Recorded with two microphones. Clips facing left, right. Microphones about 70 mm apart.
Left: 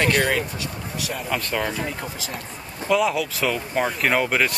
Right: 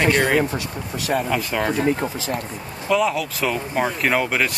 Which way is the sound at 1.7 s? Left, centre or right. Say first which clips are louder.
Right 8 dB; right.